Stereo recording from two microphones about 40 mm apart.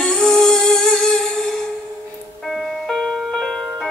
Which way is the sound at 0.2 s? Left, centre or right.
Centre.